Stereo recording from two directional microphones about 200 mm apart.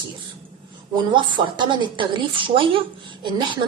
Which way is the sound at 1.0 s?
25° right (ahead or behind).